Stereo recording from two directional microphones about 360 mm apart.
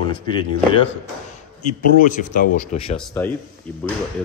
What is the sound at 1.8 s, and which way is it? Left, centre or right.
Speech, left.